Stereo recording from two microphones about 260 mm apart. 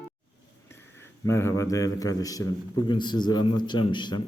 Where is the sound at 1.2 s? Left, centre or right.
Centre.